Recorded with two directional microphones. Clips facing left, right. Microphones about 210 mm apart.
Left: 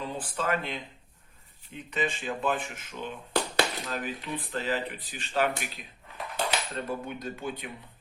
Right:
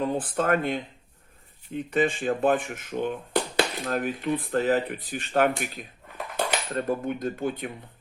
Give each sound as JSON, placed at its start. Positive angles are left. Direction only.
{"t": 0.0, "sound": "speech", "side_deg": -50}
{"t": 6.3, "sound": "cutlery", "side_deg": -50}